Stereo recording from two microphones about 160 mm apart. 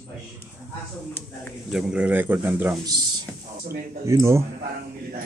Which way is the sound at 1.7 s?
5° right (ahead or behind).